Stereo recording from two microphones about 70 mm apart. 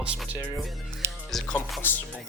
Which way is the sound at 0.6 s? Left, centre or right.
Centre.